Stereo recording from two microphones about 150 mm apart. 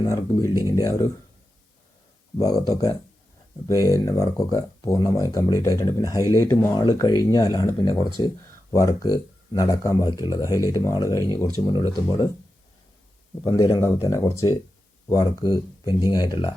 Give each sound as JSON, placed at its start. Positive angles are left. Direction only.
{"t": 0.0, "sound": "speech", "side_deg": 20}
{"t": 2.4, "sound": "speech", "side_deg": 25}
{"t": 13.4, "sound": "speech", "side_deg": 20}